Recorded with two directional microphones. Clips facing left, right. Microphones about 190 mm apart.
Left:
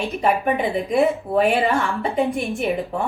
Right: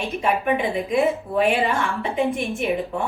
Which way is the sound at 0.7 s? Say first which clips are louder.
Left 2 dB; 35° left (ahead or behind).